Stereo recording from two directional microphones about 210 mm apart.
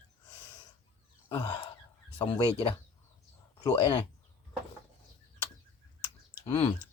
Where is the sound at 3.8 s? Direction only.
25° left (ahead or behind).